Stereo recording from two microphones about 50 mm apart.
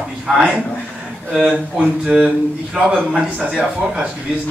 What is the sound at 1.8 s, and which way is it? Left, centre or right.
A man's voice, centre.